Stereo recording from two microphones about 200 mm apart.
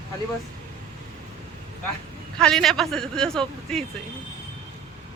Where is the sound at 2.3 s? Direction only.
Centre (ahead or behind).